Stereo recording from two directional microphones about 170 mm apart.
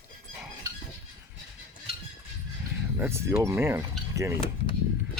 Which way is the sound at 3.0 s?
15° right (ahead or behind).